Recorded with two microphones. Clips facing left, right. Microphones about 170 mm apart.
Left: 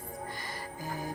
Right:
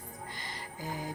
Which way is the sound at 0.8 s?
20° right (ahead or behind).